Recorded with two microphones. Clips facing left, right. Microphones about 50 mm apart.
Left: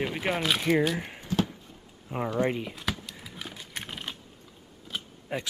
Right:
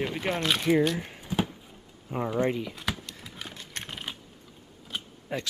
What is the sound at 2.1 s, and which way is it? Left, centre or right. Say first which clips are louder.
Speech: even; centre.